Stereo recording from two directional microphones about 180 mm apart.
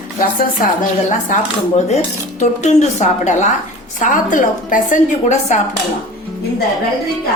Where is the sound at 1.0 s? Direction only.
40° left (ahead or behind).